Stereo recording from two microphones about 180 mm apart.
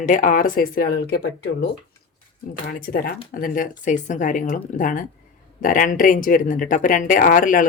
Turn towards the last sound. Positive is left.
turn(degrees=50)  # may be behind; listen again after turning